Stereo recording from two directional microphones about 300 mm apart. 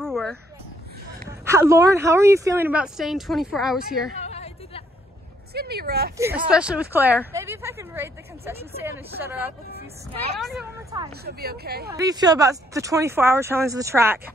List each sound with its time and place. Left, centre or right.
0.0 s a sound: centre
1.4 s a woman's voice: centre
4.2 s a sound: left
5.5 s speech: right
6.5 s a woman's voice: centre
10.9 s a woman's voice: centre
11.2 s speech: right
11.9 s a woman's voice: centre